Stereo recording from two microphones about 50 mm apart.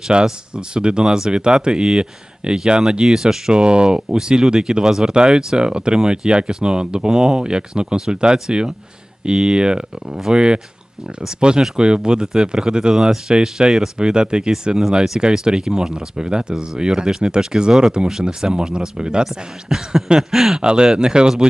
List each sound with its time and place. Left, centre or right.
0.1 s speech: centre